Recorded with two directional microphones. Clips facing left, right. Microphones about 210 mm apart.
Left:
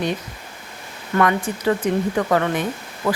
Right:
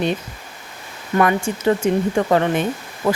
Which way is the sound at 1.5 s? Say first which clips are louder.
Right 2 dB; 25° right (ahead or behind).